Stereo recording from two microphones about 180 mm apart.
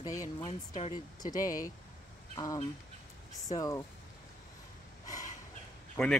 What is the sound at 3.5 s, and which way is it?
Speech, 20° left (ahead or behind).